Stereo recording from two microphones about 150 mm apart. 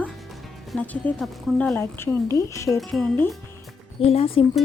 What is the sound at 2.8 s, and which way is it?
Speech, 5° left (ahead or behind).